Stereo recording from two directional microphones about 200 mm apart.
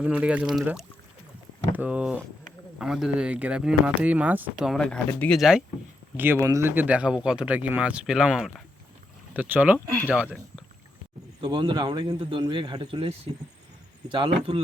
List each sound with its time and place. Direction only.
0.0 s speech: 5° right (ahead or behind)
11.3 s speech: 25° right (ahead or behind)